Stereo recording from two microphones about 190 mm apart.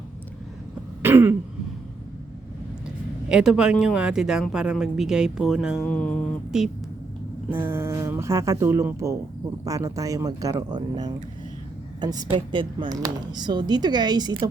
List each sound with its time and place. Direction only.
1.0 s throat clearing: 10° right (ahead or behind)
3.2 s speech: 5° right (ahead or behind)
5.8 s mantra: 10° left (ahead or behind)
7.5 s speech: 10° right (ahead or behind)